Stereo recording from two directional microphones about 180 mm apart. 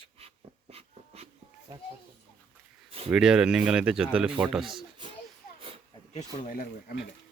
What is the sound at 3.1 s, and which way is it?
Speech, 5° right (ahead or behind).